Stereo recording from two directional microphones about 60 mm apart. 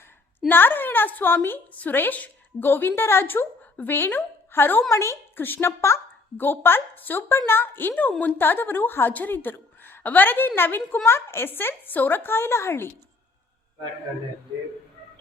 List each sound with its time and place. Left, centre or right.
0.3 s a woman's voice: left
6.3 s a woman's voice: left
7.2 s a woman's voice: left